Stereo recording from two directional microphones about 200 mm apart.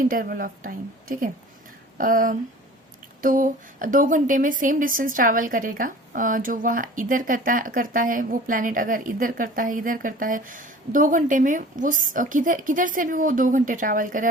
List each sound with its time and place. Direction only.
0.0 s a woman's voice: 45° right (ahead or behind)